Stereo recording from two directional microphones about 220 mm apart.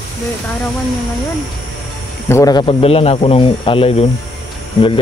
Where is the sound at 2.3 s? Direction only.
15° left (ahead or behind).